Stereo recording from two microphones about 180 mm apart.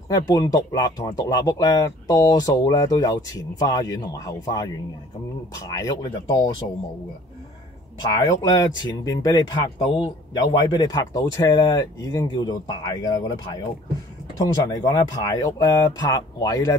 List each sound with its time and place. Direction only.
0.1 s speech: 20° left (ahead or behind)
8.1 s speech: 25° left (ahead or behind)